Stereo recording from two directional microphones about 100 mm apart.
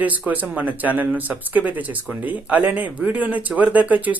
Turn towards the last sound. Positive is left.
turn(degrees=-15)  # may be behind; listen again after turning